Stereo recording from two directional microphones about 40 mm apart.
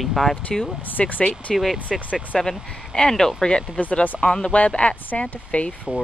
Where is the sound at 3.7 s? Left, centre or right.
Left.